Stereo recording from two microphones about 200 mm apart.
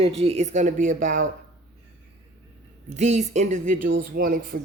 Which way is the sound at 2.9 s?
35° right (ahead or behind).